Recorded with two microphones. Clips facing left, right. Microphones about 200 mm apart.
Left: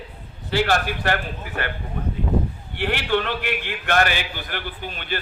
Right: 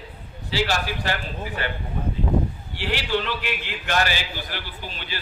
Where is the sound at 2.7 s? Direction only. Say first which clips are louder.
Left 3 dB; 55° left (ahead or behind).